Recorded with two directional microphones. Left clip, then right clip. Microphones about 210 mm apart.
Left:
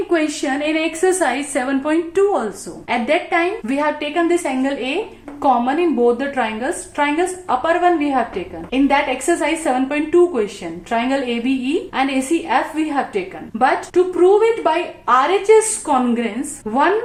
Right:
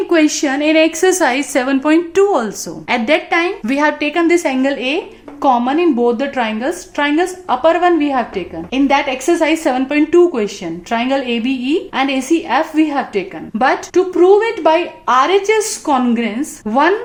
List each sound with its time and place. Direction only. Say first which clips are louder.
0.1 s a woman's voice: right 6 dB; 50° right (ahead or behind)